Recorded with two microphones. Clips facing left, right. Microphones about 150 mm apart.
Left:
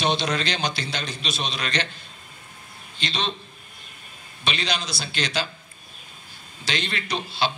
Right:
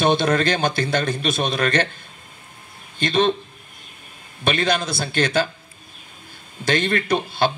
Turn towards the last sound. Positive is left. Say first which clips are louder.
# right 6 dB
turn(degrees=-50)  # may be behind; listen again after turning